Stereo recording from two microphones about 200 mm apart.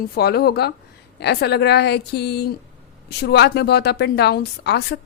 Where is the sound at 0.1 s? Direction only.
50° left (ahead or behind).